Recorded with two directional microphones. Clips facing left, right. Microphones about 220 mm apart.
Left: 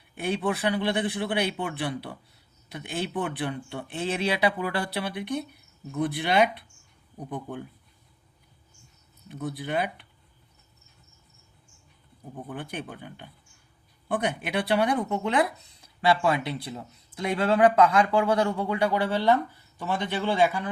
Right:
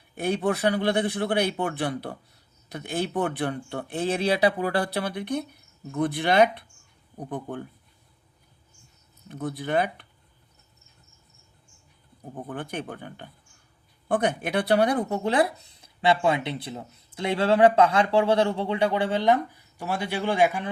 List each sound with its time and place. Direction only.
0.2 s a man's voice: 40° right (ahead or behind)
9.3 s a man's voice: 50° right (ahead or behind)
12.3 s a man's voice: 50° right (ahead or behind); by 20.7 s 15° right (ahead or behind)